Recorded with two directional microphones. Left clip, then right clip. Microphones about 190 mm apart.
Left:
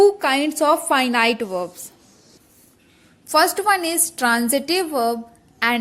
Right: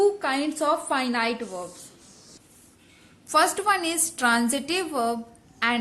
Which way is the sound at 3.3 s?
25° left (ahead or behind).